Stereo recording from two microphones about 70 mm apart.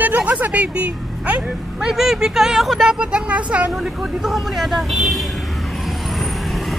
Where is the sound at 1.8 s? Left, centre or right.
Centre.